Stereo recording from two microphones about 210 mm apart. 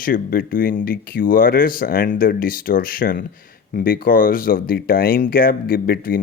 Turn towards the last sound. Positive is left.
turn(degrees=45)  # may be behind; listen again after turning